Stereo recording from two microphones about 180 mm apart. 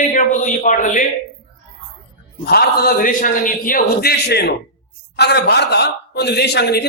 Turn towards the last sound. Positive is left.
turn(degrees=65)  # may be behind; listen again after turning